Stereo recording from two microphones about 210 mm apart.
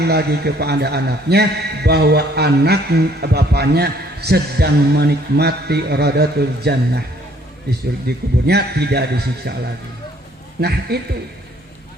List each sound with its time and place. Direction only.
0.0 s a man's voice: 50° right (ahead or behind)
10.6 s a man's voice: 50° right (ahead or behind)